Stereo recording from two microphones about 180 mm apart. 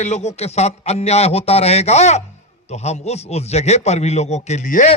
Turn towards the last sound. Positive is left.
turn(degrees=40)  # may be behind; listen again after turning